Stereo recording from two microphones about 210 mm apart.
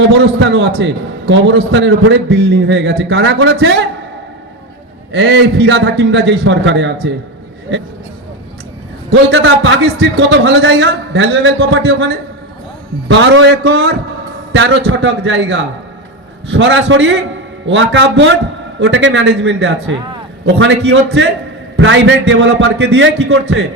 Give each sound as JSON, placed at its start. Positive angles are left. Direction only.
{"t": 0.0, "sound": "a man's voice", "side_deg": -60}
{"t": 5.1, "sound": "a man's voice", "side_deg": -55}
{"t": 9.3, "sound": "a man's voice", "side_deg": -65}
{"t": 14.5, "sound": "a man's voice", "side_deg": -60}